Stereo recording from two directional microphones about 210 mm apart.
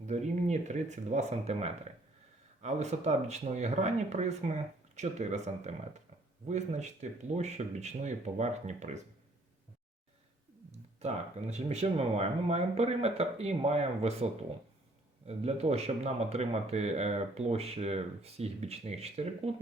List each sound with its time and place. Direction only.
0.0 s speech: 35° right (ahead or behind)
10.7 s speech: 30° right (ahead or behind)
15.3 s speech: 30° right (ahead or behind)